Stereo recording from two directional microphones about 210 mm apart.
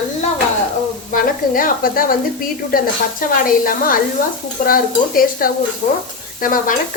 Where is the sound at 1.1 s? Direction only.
40° left (ahead or behind).